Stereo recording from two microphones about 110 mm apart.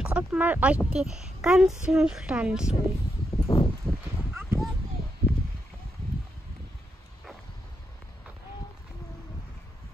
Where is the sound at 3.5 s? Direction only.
50° left (ahead or behind).